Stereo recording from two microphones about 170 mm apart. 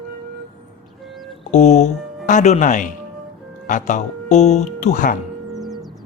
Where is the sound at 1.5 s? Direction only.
45° left (ahead or behind).